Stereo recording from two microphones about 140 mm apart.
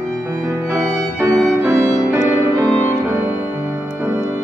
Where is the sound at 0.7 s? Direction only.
20° right (ahead or behind).